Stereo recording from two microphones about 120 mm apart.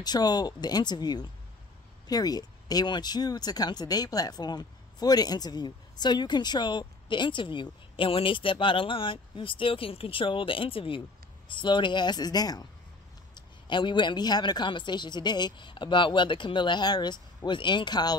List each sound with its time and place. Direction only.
0.0 s speech: 35° left (ahead or behind)